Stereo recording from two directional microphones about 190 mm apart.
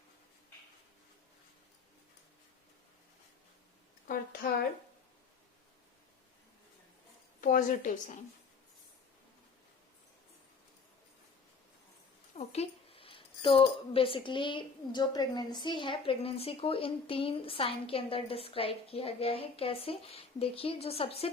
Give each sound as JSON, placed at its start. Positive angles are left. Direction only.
{"t": 4.0, "sound": "speech", "side_deg": 50}
{"t": 7.4, "sound": "a woman's voice", "side_deg": 45}
{"t": 12.4, "sound": "speech", "side_deg": 35}